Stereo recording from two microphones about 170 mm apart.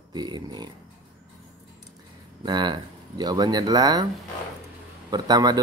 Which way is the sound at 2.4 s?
25° right (ahead or behind).